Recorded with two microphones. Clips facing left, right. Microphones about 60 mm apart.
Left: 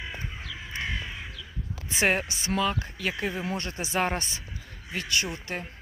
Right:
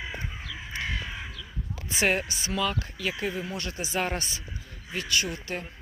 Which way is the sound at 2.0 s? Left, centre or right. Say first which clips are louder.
Left 1 dB; left.